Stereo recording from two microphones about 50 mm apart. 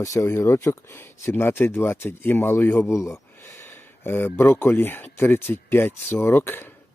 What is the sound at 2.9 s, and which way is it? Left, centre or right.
Speech, left.